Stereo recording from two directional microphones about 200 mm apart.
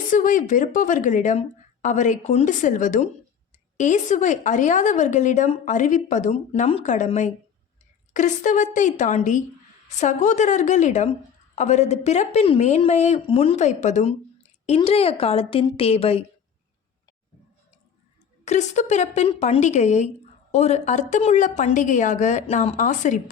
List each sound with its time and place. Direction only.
0.1 s a woman's voice: 40° left (ahead or behind)
18.4 s a woman's voice: 35° left (ahead or behind)